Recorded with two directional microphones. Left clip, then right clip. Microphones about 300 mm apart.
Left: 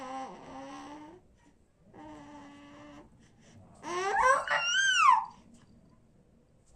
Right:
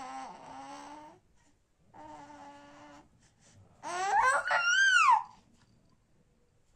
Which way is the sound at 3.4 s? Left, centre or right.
Centre.